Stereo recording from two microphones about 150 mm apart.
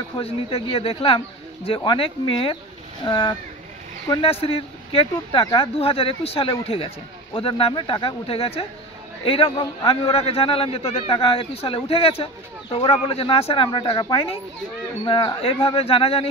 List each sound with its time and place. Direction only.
0.2 s a man's voice: 40° left (ahead or behind)
4.2 s a man's voice: 40° left (ahead or behind)